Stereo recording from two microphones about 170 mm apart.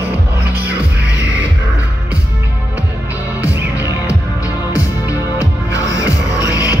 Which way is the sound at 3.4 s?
20° left (ahead or behind).